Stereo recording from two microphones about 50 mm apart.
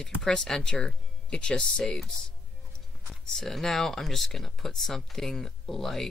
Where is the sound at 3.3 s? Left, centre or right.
Centre.